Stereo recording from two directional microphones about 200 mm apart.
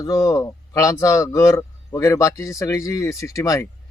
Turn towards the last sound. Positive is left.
turn(degrees=15)  # may be behind; listen again after turning